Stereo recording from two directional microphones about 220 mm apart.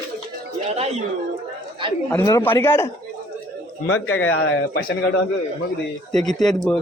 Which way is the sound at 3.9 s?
65° left (ahead or behind).